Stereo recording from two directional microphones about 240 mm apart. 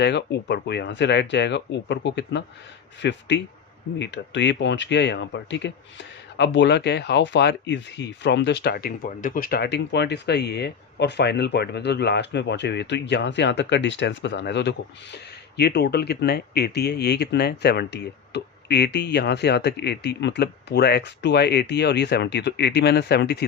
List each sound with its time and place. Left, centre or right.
0.0 s speech: left